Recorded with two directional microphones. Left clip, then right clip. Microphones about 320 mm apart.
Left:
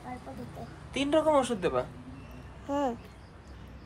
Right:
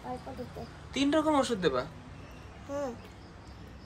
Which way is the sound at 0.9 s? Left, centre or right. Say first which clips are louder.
Left 2 dB; centre.